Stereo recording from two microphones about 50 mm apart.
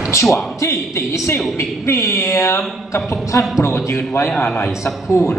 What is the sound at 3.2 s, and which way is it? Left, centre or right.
Speech, left.